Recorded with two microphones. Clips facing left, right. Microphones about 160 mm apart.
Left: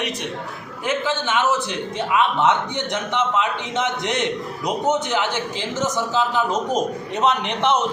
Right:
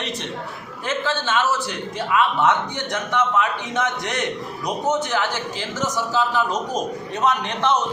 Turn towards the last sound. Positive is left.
turn(degrees=20)  # may be behind; listen again after turning